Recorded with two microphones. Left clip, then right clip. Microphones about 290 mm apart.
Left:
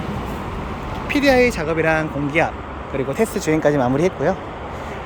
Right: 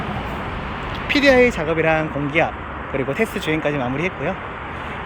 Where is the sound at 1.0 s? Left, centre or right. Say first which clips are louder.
Right 1 dB; centre.